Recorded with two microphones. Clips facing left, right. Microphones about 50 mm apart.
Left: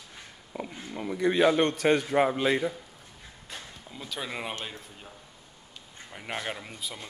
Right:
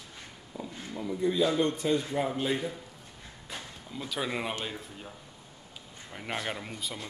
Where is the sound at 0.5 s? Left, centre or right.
Left.